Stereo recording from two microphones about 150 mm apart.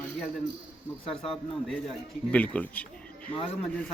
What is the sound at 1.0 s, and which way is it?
Speech, 40° left (ahead or behind).